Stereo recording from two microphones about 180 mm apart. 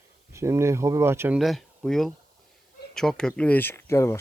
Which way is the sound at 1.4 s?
Centre (ahead or behind).